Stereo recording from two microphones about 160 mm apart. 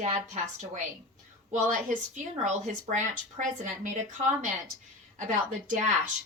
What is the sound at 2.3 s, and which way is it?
A woman's voice, 50° right (ahead or behind).